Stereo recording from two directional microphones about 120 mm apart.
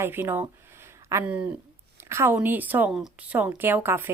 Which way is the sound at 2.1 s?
20° right (ahead or behind).